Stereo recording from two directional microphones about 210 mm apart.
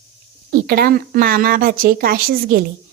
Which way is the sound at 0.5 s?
45° right (ahead or behind).